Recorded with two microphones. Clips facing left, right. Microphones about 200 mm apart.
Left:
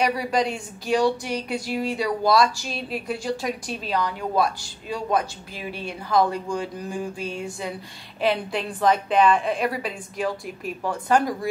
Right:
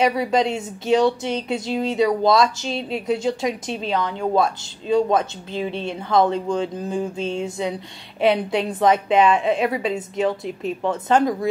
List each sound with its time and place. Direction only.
0.0 s speech: 25° right (ahead or behind)